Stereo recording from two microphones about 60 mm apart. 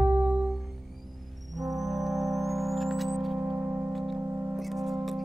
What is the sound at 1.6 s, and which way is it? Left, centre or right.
Music, centre.